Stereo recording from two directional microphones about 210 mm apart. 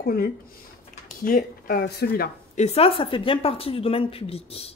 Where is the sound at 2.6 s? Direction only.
30° left (ahead or behind).